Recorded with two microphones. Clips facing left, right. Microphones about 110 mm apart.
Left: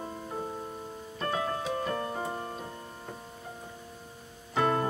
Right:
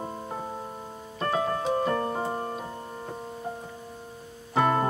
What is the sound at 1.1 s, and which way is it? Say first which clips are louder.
Music: right 5 dB; 35° right (ahead or behind).